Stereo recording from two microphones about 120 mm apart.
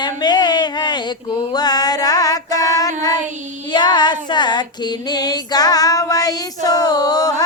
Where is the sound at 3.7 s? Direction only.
40° left (ahead or behind).